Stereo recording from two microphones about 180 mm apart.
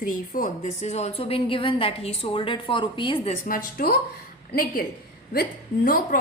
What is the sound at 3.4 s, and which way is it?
Speech, 50° left (ahead or behind).